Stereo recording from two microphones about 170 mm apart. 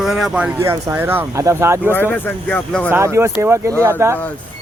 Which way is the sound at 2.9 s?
15° right (ahead or behind).